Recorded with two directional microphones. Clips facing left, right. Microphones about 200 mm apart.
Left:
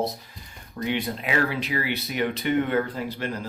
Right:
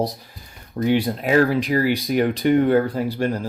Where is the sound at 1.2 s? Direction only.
45° right (ahead or behind).